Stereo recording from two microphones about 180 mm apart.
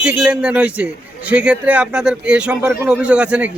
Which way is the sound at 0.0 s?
5° right (ahead or behind).